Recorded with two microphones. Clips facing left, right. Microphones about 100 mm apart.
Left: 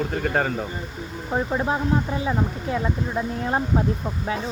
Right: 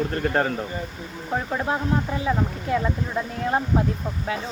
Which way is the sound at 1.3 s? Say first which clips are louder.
Left 2 dB; 15° left (ahead or behind).